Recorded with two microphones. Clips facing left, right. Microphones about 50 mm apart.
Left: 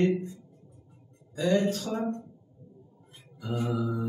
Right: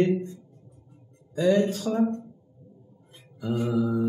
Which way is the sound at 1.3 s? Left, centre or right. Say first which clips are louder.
Right 4 dB; centre.